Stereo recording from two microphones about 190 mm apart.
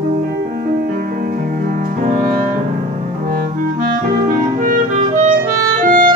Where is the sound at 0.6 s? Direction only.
50° right (ahead or behind).